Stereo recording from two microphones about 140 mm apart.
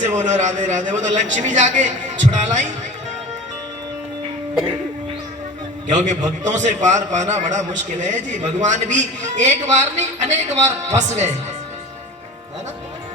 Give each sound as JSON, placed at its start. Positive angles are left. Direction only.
{"t": 0.0, "sound": "a man's voice", "side_deg": -55}
{"t": 5.9, "sound": "a man's voice", "side_deg": -60}